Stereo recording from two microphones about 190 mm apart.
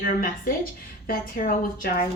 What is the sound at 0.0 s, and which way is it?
A woman's voice, 50° left (ahead or behind).